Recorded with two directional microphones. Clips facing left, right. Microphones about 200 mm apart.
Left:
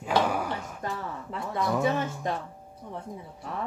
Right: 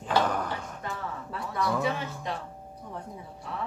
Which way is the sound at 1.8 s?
45° left (ahead or behind).